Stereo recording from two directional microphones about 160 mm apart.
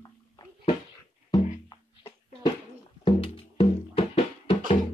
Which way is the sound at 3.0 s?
35° left (ahead or behind).